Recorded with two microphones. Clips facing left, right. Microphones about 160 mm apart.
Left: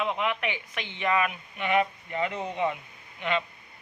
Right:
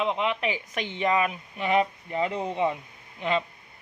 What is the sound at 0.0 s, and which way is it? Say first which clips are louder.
Speech: right 2 dB; 25° right (ahead or behind).